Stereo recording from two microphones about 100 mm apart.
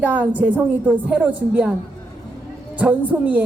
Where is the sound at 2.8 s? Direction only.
15° right (ahead or behind).